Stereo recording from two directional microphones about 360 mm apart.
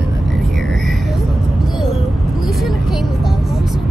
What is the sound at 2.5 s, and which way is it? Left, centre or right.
Speech, centre.